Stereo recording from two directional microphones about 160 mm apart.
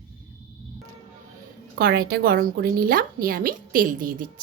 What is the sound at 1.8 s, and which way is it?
A woman's voice, 75° right (ahead or behind).